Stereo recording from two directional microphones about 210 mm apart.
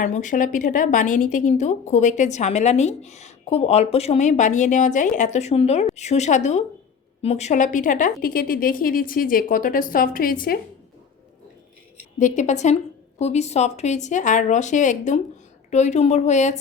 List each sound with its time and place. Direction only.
0.0 s a woman's voice: 35° left (ahead or behind)
12.2 s a woman's voice: 35° left (ahead or behind)